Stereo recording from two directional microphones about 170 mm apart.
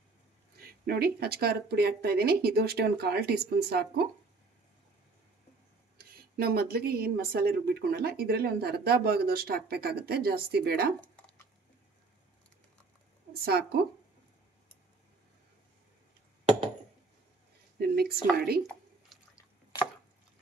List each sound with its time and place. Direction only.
0.6 s speech: 65° right (ahead or behind)
5.9 s speech: 65° right (ahead or behind)
13.3 s speech: 65° right (ahead or behind)
17.7 s speech: 65° right (ahead or behind)